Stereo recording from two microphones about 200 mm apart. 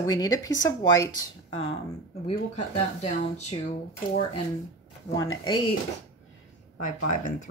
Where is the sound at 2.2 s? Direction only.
30° left (ahead or behind).